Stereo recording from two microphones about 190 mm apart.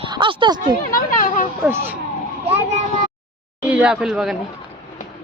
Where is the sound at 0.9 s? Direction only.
45° left (ahead or behind).